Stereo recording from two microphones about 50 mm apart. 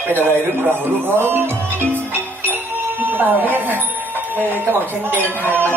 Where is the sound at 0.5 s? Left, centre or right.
Right.